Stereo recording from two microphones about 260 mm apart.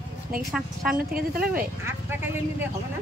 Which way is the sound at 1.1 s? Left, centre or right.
Right.